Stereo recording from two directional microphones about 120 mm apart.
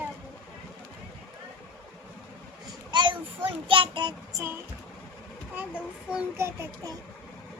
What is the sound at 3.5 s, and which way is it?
Child singing, 45° right (ahead or behind).